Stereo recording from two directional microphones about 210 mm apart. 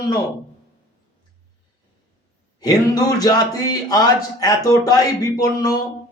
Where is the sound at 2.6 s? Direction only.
15° left (ahead or behind).